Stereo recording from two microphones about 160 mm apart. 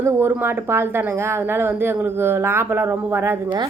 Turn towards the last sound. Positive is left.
turn(degrees=-15)  # may be behind; listen again after turning